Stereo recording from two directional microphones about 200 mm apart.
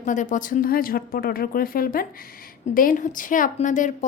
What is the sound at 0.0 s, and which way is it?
A woman's voice, 40° left (ahead or behind).